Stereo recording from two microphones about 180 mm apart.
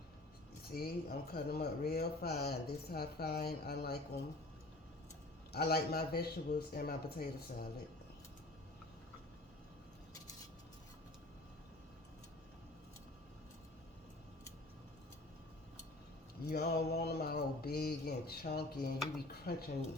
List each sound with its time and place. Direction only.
0.7 s speech: 55° left (ahead or behind)
5.5 s speech: 60° left (ahead or behind)
16.5 s speech: 60° left (ahead or behind)